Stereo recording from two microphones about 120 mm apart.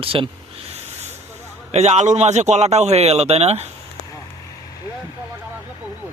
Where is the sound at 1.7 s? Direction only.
65° right (ahead or behind).